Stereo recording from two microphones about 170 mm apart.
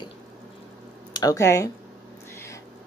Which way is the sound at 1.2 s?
20° left (ahead or behind).